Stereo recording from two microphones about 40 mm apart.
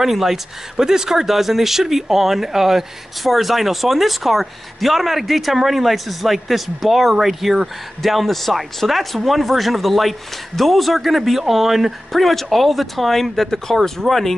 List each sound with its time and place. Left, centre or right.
0.0 s speech: centre